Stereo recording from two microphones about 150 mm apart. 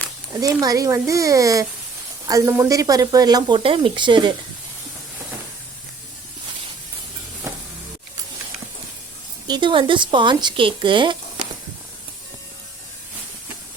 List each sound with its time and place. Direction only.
0.3 s speech: 25° right (ahead or behind)
7.5 s music: 20° right (ahead or behind)
9.5 s a woman's voice: 30° right (ahead or behind)